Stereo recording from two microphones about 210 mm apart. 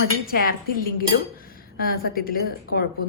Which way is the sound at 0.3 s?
45° left (ahead or behind).